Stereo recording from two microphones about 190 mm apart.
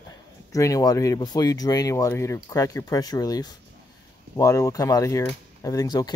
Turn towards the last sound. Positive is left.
turn(degrees=20)  # may be behind; listen again after turning